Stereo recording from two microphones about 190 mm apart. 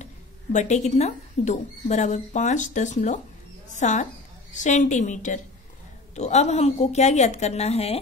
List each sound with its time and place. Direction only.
0.0 s a woman's voice: 40° left (ahead or behind)